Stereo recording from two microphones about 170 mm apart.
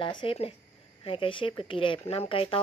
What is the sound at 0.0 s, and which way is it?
Speech, 30° left (ahead or behind).